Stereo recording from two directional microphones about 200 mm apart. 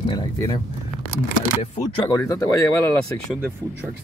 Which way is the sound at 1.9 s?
15° left (ahead or behind).